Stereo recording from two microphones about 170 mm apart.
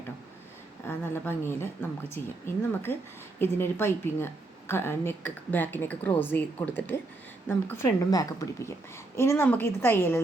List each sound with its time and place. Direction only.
0.9 s a woman's voice: 15° left (ahead or behind)
3.3 s a woman's voice: 15° left (ahead or behind)